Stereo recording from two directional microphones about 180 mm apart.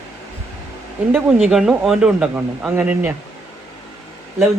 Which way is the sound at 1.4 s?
5° right (ahead or behind).